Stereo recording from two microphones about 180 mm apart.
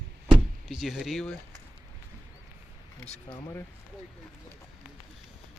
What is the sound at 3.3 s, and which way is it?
Speech, 20° left (ahead or behind).